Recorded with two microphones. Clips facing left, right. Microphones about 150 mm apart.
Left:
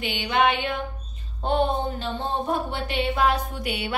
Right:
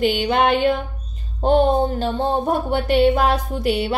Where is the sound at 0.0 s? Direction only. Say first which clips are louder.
Right 5 dB; 40° right (ahead or behind).